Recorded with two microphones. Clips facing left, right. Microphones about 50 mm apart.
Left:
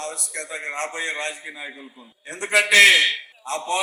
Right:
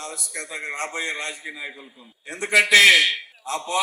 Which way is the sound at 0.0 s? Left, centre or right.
Left.